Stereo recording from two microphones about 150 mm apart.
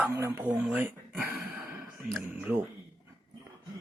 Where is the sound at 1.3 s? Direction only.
5° right (ahead or behind).